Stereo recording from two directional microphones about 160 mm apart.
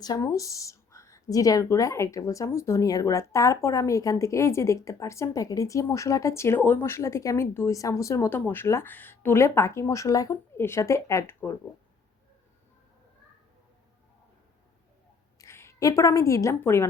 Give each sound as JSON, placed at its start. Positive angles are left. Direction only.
{"t": 0.0, "sound": "a woman's voice", "side_deg": 20}
{"t": 15.4, "sound": "a woman's voice", "side_deg": 15}